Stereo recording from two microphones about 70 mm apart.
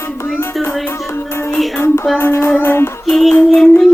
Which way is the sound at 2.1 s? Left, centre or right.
Left.